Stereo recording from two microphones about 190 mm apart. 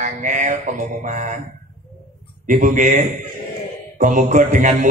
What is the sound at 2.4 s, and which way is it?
A man's voice, 40° right (ahead or behind).